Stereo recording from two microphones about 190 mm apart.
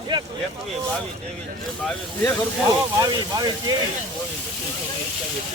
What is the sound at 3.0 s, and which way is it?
Speech, 20° right (ahead or behind).